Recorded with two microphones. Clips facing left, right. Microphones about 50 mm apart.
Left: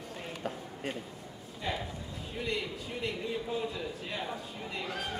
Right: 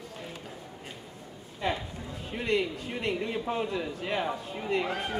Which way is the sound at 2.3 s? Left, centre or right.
Right.